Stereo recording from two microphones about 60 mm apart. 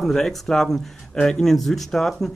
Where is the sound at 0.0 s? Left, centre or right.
Centre.